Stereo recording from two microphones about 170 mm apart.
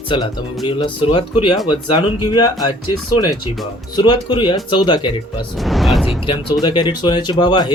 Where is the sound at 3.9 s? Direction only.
25° left (ahead or behind).